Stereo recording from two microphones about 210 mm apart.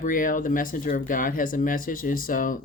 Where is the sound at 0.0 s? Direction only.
40° left (ahead or behind).